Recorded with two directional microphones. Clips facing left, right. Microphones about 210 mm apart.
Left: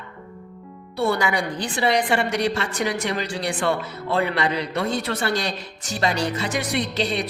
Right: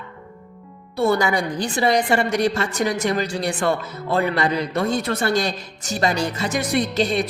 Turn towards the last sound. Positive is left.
turn(degrees=-45)  # may be behind; listen again after turning